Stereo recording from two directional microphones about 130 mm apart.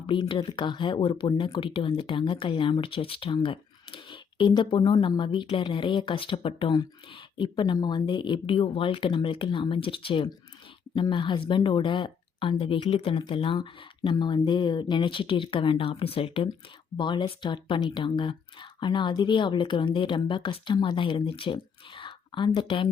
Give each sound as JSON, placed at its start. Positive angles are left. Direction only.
{"t": 0.1, "sound": "speech", "side_deg": 40}